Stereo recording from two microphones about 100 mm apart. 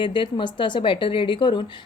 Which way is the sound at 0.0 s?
55° left (ahead or behind).